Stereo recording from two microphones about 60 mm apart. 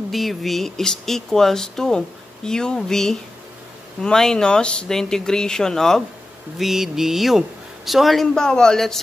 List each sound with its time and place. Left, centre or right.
0.1 s speech: centre
6.6 s speech: centre